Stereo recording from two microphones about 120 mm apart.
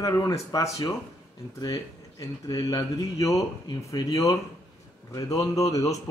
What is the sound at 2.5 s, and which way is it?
A man's voice, 30° left (ahead or behind).